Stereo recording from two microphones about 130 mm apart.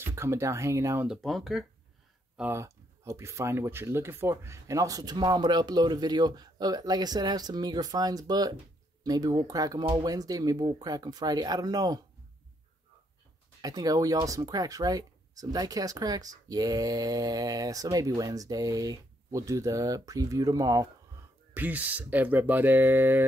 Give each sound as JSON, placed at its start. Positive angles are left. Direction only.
{"t": 0.0, "sound": "speech", "side_deg": -20}
{"t": 1.0, "sound": "speech", "side_deg": 0}
{"t": 2.5, "sound": "speech", "side_deg": -20}
{"t": 13.6, "sound": "speech", "side_deg": -30}
{"t": 21.5, "sound": "speech", "side_deg": -15}